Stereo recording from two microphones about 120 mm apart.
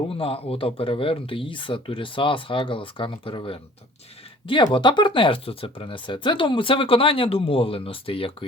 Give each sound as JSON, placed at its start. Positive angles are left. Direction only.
{"t": 0.1, "sound": "speech", "side_deg": 50}